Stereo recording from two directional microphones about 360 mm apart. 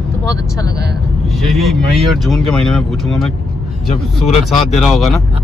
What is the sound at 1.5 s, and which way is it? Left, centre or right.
Speech, centre.